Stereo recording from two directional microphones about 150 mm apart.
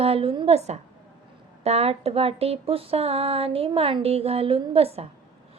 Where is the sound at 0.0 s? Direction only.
40° right (ahead or behind).